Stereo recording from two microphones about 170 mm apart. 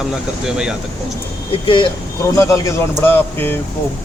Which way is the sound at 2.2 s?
20° left (ahead or behind).